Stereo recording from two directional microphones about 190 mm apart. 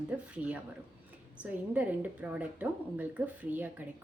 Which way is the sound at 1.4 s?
10° right (ahead or behind).